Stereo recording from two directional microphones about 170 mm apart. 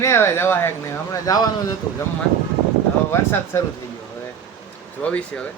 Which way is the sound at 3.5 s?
15° left (ahead or behind).